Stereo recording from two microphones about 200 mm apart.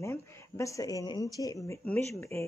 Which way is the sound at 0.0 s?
15° left (ahead or behind).